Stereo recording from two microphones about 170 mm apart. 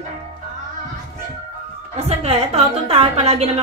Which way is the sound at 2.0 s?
35° right (ahead or behind).